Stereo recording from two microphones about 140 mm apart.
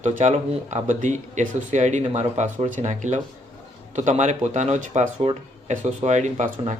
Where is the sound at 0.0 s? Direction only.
65° right (ahead or behind).